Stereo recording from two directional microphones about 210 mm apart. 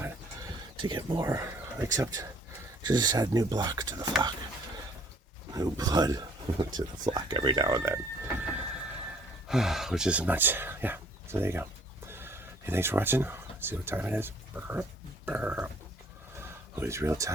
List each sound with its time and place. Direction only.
0.8 s speech: 20° right (ahead or behind)
5.5 s speech: 20° right (ahead or behind)
16.4 s a sound: 10° right (ahead or behind)